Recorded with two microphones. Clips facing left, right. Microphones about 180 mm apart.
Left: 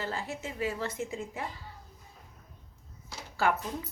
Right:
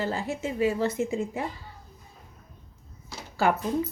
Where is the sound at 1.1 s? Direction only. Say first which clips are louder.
Right 8 dB; 25° right (ahead or behind).